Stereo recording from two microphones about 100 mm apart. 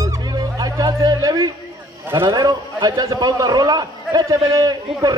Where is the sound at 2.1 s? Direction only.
45° right (ahead or behind).